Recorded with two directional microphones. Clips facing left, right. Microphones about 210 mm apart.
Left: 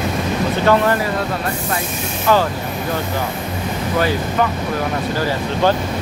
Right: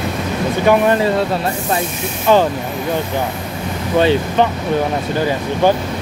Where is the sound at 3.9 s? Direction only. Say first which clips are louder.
Right 5 dB; 25° right (ahead or behind).